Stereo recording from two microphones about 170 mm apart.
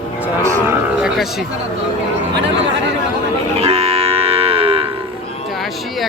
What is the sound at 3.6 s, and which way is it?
Livestock, 35° right (ahead or behind).